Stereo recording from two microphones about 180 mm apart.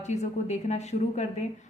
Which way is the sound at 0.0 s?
40° left (ahead or behind).